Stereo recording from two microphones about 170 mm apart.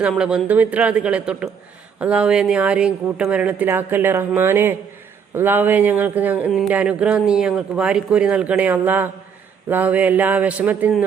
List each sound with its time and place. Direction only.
0.0 s speech: 5° right (ahead or behind)